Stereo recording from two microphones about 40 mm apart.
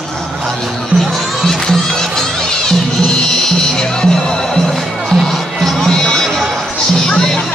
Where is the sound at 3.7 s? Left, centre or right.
Centre.